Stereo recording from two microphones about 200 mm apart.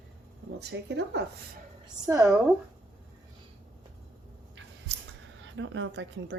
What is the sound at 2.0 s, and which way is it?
Speech, 15° right (ahead or behind).